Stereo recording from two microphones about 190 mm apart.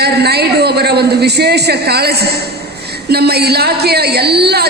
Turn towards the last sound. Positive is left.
turn(degrees=-60)  # may be behind; listen again after turning